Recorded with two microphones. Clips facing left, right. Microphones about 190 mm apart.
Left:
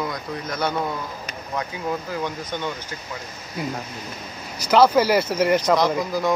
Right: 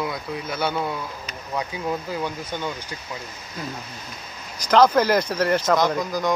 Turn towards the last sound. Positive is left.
turn(degrees=5)  # may be behind; listen again after turning